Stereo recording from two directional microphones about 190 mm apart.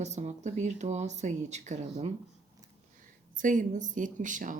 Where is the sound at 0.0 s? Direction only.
35° right (ahead or behind).